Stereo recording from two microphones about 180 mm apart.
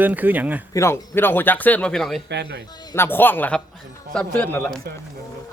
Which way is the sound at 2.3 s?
70° right (ahead or behind).